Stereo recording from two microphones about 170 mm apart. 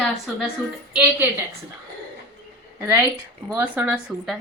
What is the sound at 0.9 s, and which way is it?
Speech, 10° right (ahead or behind).